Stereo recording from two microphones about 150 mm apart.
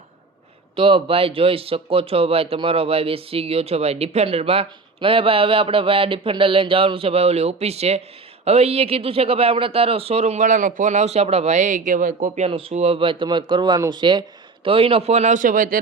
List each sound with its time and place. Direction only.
0.8 s speech: 35° right (ahead or behind); by 12.5 s 55° right (ahead or behind)
12.5 s speech: 40° right (ahead or behind); by 15.8 s 70° right (ahead or behind)